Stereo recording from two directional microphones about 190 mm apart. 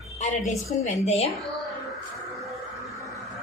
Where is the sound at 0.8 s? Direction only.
35° left (ahead or behind).